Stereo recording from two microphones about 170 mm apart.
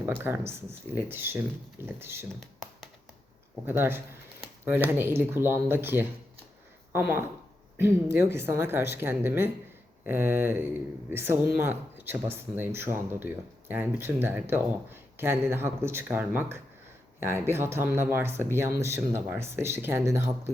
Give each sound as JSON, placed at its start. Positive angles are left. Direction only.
{"t": 0.0, "sound": "speech", "side_deg": -15}
{"t": 3.7, "sound": "speech", "side_deg": -15}